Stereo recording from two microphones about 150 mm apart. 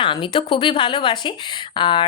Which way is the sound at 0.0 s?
35° left (ahead or behind).